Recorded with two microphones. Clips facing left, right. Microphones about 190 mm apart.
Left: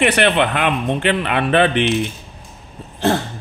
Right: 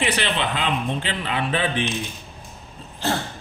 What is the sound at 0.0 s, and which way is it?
Speech, 60° left (ahead or behind).